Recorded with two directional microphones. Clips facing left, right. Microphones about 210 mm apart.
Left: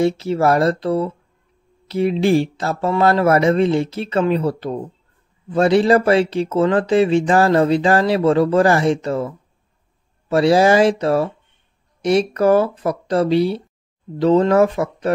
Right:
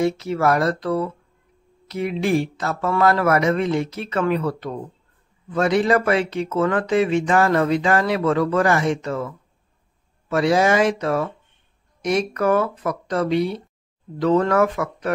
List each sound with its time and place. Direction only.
0.0 s speech: 30° left (ahead or behind)